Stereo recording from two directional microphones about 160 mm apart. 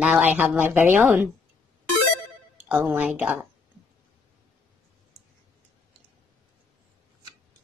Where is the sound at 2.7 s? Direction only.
10° right (ahead or behind).